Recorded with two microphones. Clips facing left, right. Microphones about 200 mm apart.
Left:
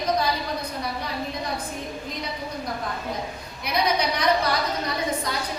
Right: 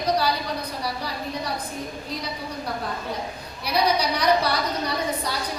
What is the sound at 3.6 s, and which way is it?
Speech, 35° right (ahead or behind).